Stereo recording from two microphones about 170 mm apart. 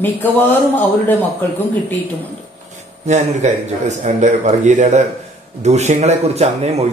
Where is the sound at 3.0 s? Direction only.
45° right (ahead or behind).